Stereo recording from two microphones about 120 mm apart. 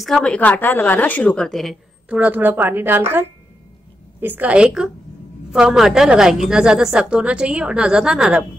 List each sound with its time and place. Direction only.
0.0 s a woman's voice: 5° left (ahead or behind)
2.0 s a woman's voice: 10° right (ahead or behind)